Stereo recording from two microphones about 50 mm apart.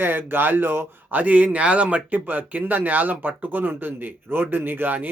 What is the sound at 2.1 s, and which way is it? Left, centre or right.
Speech, right.